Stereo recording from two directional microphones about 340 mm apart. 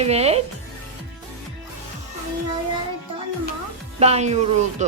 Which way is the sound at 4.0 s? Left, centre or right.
Centre.